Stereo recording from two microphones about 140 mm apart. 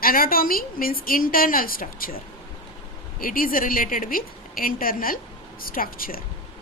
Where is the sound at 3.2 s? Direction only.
90° left.